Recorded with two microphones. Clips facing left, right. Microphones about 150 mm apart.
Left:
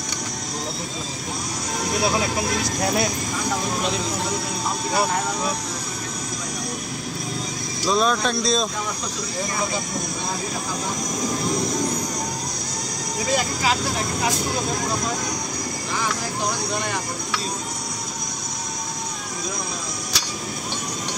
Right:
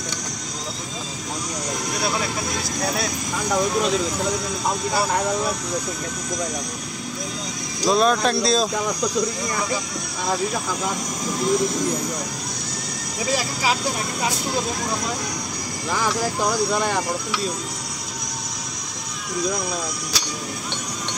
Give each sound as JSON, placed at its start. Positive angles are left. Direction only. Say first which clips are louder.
{"t": 7.9, "sound": "speech", "louder": "right 2 dB", "side_deg": 0}